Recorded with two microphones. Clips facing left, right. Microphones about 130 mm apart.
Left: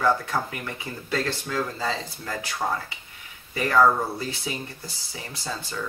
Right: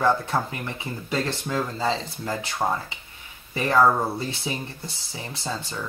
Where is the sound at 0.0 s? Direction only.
25° right (ahead or behind).